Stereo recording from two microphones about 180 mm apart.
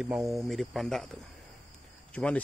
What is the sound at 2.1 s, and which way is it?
Speech, 5° left (ahead or behind).